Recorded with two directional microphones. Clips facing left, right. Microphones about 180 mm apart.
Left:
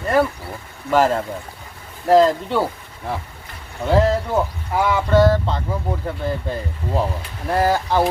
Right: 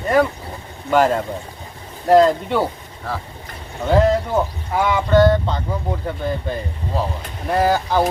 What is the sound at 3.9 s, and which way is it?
Speech, centre (ahead or behind).